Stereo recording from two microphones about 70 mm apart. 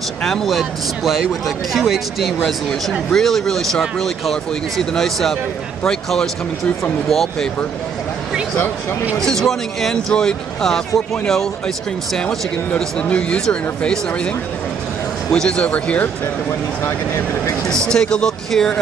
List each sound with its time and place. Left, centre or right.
0.2 s speech: centre
9.2 s speech: centre
15.3 s speech: centre
17.6 s speech: centre